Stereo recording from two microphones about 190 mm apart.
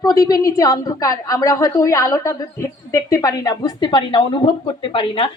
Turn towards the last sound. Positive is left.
turn(degrees=30)  # may be behind; listen again after turning